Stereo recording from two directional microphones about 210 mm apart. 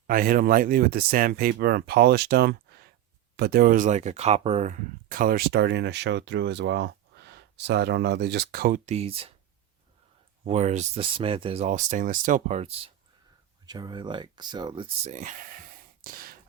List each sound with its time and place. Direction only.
0.1 s speech: 40° right (ahead or behind)
10.4 s speech: 30° right (ahead or behind)
13.7 s speech: 20° right (ahead or behind)
15.1 s speech: 40° right (ahead or behind)
16.0 s a sound: 45° right (ahead or behind)